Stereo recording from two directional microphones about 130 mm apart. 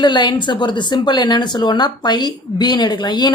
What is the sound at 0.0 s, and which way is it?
Speech, 35° left (ahead or behind).